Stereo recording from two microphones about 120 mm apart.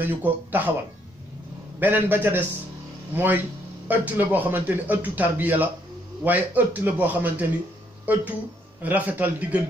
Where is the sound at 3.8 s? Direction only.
15° right (ahead or behind).